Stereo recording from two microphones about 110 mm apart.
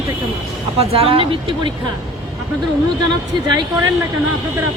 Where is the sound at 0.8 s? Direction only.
60° right (ahead or behind).